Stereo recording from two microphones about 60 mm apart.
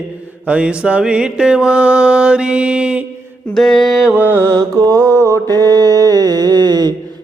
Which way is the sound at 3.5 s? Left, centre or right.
Centre.